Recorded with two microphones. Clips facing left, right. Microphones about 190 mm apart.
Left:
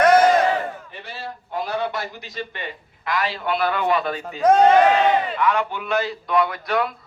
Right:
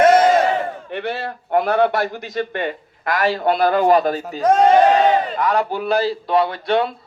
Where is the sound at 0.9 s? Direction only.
65° right (ahead or behind).